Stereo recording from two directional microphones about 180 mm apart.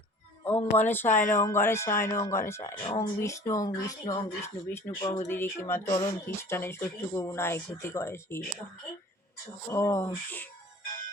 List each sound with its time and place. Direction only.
0.8 s speech: 10° left (ahead or behind)
2.8 s speech: 30° left (ahead or behind)
3.2 s speech: 15° left (ahead or behind)
9.6 s speech: 15° left (ahead or behind)